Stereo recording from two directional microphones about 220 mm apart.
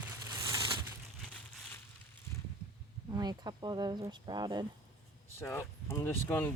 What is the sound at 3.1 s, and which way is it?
Speech, 20° right (ahead or behind).